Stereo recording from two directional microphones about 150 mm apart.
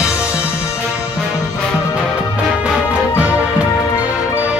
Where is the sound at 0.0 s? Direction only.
20° left (ahead or behind).